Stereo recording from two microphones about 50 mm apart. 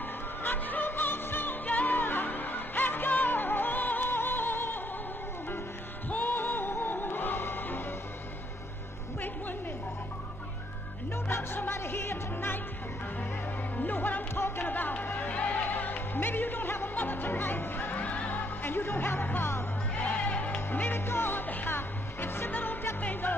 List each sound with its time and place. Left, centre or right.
0.4 s music: left
6.0 s music: left
11.2 s music: left
13.7 s music: left
15.7 s music: left
20.0 s music: left
20.9 s music: left